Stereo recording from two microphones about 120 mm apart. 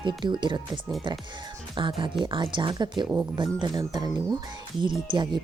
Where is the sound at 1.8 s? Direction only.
45° right (ahead or behind).